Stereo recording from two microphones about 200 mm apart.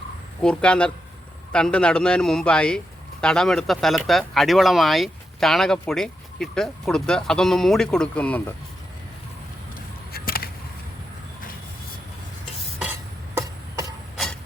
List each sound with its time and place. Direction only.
0.4 s a man's voice: 5° left (ahead or behind)
10.1 s chop: 50° left (ahead or behind)
12.8 s a sound: 10° right (ahead or behind)